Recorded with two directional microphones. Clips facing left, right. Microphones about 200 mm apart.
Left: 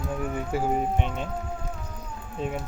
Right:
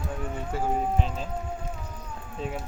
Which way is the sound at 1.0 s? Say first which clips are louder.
Left 2 dB; 35° right (ahead or behind).